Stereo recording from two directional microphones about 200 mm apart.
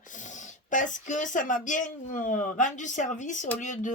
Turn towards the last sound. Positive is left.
turn(degrees=40)  # may be behind; listen again after turning